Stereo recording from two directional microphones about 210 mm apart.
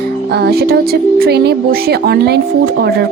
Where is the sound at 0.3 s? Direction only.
50° right (ahead or behind).